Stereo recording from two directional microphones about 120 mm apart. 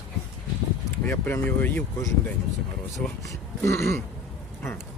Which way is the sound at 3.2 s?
25° left (ahead or behind).